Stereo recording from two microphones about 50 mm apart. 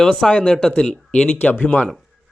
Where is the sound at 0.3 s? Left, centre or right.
Left.